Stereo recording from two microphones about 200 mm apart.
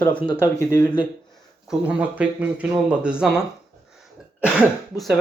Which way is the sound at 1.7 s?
5° right (ahead or behind).